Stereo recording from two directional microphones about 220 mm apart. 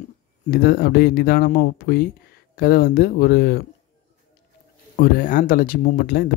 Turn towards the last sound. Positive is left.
turn(degrees=45)  # may be behind; listen again after turning